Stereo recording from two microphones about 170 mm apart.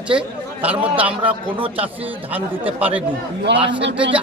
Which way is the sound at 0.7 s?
30° right (ahead or behind).